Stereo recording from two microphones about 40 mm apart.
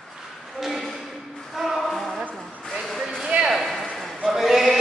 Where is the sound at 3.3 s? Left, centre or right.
Right.